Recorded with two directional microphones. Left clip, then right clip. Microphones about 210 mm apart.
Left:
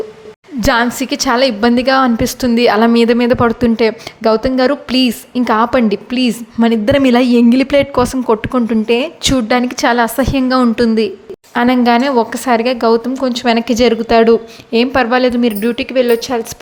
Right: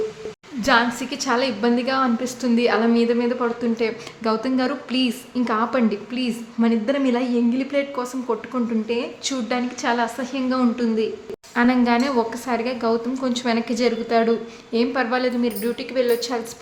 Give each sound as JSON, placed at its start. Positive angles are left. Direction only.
{"t": 0.6, "sound": "a woman's voice", "side_deg": 35}